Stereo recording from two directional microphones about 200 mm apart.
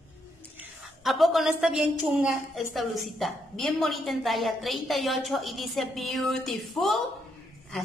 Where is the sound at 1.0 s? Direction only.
Centre (ahead or behind).